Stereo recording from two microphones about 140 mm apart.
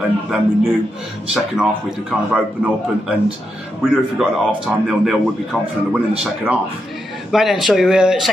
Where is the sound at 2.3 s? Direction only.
5° right (ahead or behind).